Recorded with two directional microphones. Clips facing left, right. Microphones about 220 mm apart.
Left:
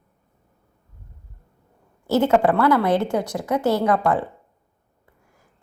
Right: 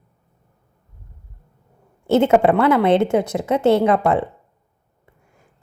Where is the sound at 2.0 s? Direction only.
25° right (ahead or behind).